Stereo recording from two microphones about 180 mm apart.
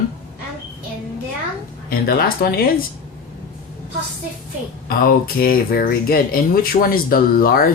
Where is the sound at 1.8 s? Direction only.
55° left (ahead or behind).